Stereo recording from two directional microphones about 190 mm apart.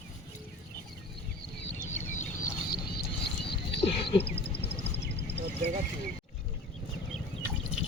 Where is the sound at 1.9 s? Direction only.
40° left (ahead or behind).